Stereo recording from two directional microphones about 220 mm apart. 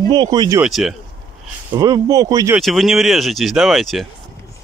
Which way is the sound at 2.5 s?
Centre (ahead or behind).